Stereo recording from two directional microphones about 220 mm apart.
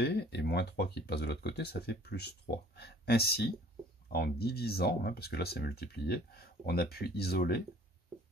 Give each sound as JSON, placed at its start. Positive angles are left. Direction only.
{"t": 0.0, "sound": "speech", "side_deg": 50}